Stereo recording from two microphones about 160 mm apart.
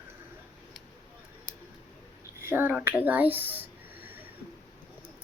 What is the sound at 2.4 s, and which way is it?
A child's voice, 10° right (ahead or behind).